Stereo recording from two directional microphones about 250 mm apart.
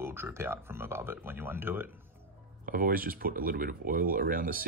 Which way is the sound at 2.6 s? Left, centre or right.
Right.